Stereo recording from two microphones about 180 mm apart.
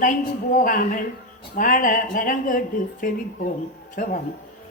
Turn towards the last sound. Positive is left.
turn(degrees=50)  # may be behind; listen again after turning